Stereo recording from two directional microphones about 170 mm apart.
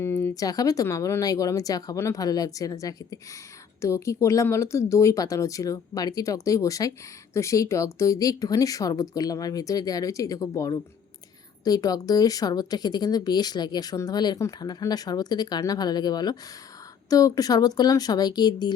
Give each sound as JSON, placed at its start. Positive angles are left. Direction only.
{"t": 0.0, "sound": "speech", "side_deg": 15}